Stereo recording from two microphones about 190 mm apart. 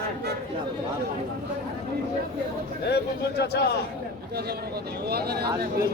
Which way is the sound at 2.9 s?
60° left (ahead or behind).